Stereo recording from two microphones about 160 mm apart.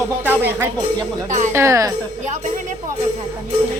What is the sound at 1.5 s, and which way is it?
Speech, 20° right (ahead or behind).